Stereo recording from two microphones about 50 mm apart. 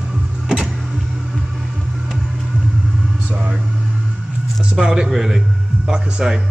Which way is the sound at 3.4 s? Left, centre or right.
Centre.